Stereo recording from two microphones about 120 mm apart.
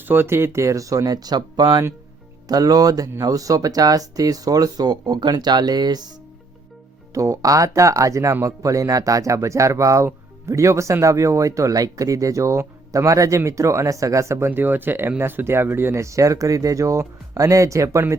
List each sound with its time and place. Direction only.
0.0 s speech: 20° right (ahead or behind); by 6.1 s 35° right (ahead or behind)
7.1 s speech: 25° right (ahead or behind)